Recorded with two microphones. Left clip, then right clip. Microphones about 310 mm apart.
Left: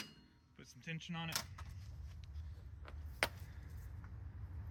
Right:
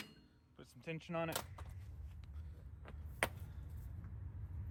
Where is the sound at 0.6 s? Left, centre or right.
Centre.